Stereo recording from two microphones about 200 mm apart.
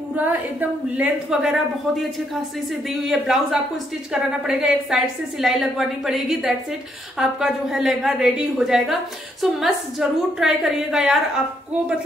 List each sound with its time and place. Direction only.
0.1 s a woman's voice: 10° right (ahead or behind)